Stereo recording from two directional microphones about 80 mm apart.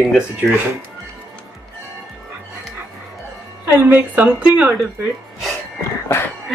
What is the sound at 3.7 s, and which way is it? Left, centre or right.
A woman's voice, right.